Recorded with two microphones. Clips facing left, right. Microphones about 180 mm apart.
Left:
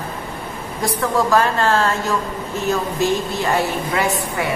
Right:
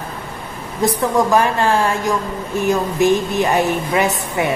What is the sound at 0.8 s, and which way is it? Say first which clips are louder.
A woman's voice: right 3 dB; 20° right (ahead or behind).